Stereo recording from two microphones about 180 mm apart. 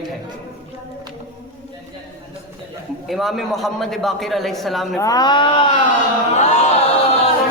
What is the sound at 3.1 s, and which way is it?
A woman's voice, centre (ahead or behind).